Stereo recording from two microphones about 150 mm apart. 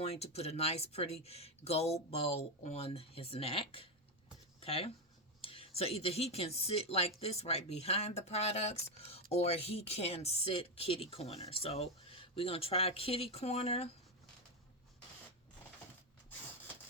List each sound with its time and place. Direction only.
0.0 s speech: 45° left (ahead or behind)